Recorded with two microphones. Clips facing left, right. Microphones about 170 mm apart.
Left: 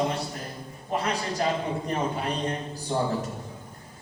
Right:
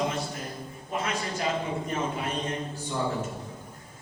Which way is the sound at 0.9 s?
35° left (ahead or behind).